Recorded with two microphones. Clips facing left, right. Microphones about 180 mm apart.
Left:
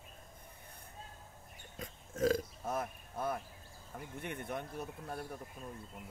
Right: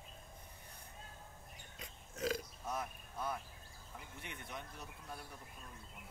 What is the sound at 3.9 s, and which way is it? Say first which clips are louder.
Speech: left 9 dB; 50° left (ahead or behind).